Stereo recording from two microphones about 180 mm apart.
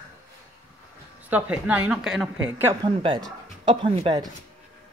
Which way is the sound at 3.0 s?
25° right (ahead or behind).